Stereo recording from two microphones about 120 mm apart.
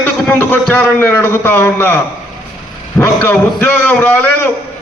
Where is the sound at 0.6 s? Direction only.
15° left (ahead or behind).